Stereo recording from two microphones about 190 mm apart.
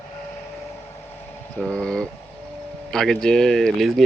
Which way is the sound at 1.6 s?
5° left (ahead or behind).